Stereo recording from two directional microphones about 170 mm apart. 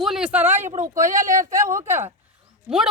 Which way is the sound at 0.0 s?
5° right (ahead or behind).